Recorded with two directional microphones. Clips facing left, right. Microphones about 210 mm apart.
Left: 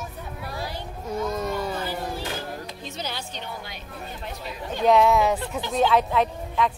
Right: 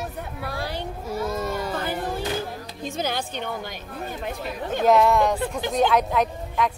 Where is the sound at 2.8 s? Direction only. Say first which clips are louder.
Right 9 dB; 50° right (ahead or behind).